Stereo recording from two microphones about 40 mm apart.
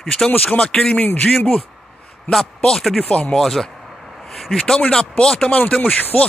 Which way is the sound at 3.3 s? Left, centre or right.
Centre.